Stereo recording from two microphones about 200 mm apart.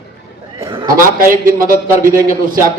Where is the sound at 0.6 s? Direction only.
25° right (ahead or behind).